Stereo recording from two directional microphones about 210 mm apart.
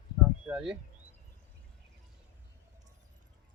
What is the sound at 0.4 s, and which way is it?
Speech, 5° right (ahead or behind).